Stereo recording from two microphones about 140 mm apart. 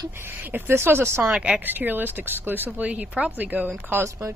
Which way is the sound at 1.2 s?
5° right (ahead or behind).